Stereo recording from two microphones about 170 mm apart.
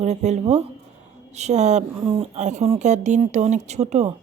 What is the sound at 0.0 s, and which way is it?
Speech, 40° right (ahead or behind).